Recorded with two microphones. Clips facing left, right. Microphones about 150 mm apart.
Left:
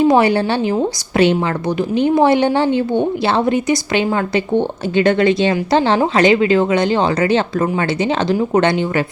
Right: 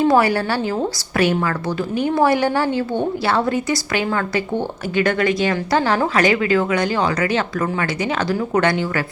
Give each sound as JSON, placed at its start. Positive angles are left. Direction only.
{"t": 0.1, "sound": "speech", "side_deg": 20}